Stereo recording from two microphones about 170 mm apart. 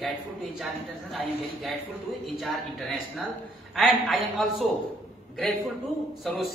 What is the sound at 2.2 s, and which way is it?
Speech, centre (ahead or behind).